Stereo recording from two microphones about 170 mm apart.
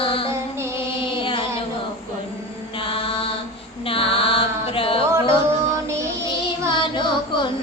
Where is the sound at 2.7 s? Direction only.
30° left (ahead or behind).